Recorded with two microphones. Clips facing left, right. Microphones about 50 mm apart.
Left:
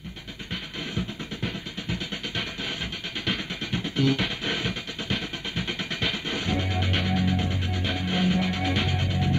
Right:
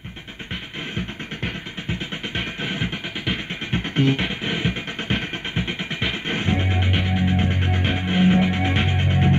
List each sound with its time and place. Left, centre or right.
0.9 s music: right